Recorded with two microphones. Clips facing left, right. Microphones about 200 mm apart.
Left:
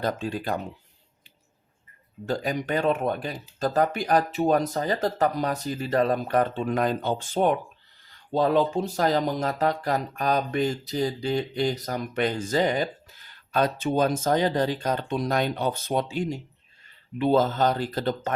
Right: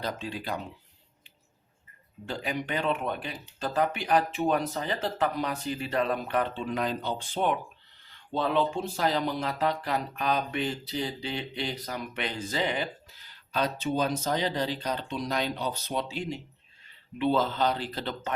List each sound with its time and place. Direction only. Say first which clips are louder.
0.0 s speech: left 6 dB; 50° left (ahead or behind)
2.2 s speech: left 5 dB; 40° left (ahead or behind)